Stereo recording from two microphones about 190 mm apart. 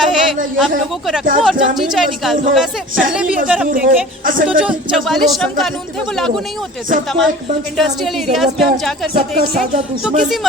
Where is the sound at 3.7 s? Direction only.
45° right (ahead or behind).